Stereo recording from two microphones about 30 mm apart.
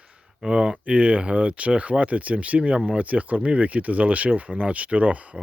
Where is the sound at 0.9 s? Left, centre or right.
Right.